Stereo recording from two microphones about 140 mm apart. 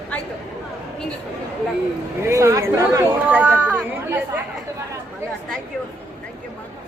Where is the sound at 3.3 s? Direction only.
10° right (ahead or behind).